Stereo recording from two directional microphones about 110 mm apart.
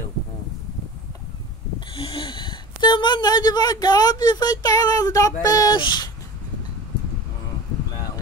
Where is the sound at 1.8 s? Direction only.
50° left (ahead or behind).